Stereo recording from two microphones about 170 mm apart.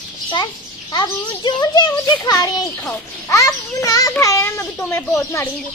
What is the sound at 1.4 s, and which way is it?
A child's voice, 25° left (ahead or behind).